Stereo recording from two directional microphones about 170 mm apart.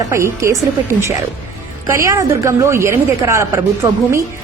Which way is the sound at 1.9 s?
15° right (ahead or behind).